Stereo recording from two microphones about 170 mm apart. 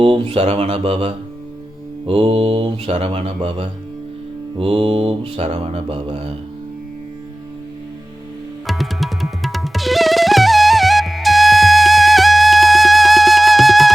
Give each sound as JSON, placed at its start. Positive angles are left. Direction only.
{"t": 0.0, "sound": "mantra", "side_deg": -30}
{"t": 8.6, "sound": "music", "side_deg": 0}